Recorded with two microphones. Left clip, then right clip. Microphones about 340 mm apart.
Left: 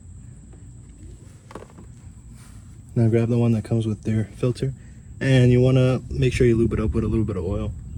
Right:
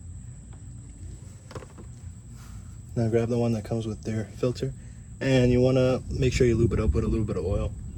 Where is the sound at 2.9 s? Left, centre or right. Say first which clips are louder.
Left 3 dB; centre.